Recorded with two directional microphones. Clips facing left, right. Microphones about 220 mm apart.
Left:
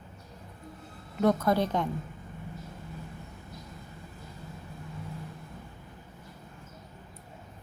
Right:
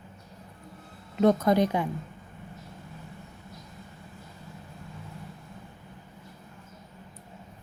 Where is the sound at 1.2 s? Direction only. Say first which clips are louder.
Right 3 dB; 20° right (ahead or behind).